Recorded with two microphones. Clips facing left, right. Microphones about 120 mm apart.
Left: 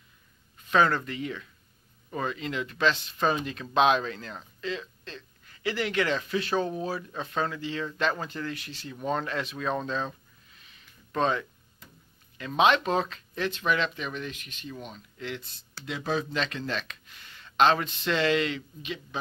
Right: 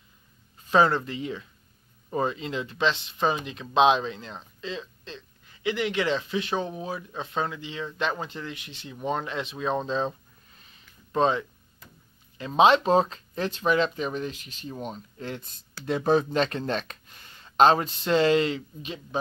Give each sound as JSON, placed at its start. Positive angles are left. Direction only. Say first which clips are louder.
{"t": 0.7, "sound": "speech", "louder": "right 2 dB", "side_deg": -25}